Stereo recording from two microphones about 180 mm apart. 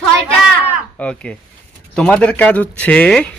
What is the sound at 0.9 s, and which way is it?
Speech, 5° left (ahead or behind).